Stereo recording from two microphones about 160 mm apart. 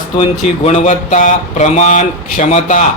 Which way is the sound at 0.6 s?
45° left (ahead or behind).